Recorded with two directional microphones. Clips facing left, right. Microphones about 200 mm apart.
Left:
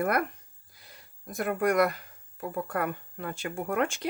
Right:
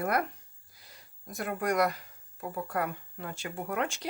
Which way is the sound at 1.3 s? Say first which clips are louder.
Left 4 dB; 55° left (ahead or behind).